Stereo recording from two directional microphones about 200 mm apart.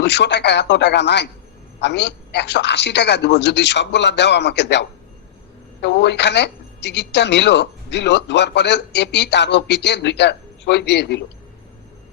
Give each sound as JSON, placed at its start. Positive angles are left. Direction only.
{"t": 0.0, "sound": "speech", "side_deg": 60}